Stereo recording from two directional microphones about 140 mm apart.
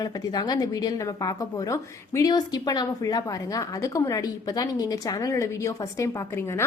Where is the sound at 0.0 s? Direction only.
30° left (ahead or behind).